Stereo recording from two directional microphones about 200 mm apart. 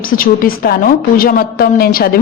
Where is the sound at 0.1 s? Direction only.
45° left (ahead or behind).